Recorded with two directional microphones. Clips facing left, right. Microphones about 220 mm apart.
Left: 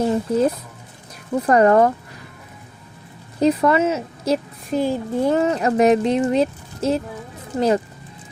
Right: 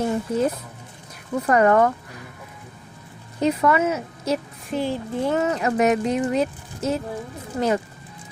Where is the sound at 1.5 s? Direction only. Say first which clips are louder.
Left 3 dB; 35° left (ahead or behind).